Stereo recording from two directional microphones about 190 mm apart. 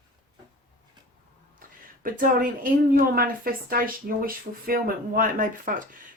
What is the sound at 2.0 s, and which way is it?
Speech, 45° right (ahead or behind).